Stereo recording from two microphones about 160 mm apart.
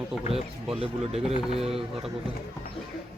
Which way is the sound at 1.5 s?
40° right (ahead or behind).